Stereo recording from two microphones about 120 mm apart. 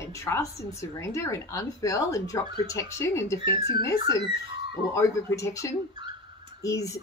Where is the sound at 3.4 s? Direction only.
45° right (ahead or behind).